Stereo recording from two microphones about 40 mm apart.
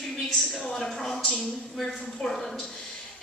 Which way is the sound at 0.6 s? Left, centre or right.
Centre.